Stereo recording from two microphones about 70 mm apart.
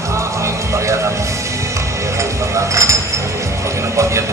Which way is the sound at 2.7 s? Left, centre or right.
Right.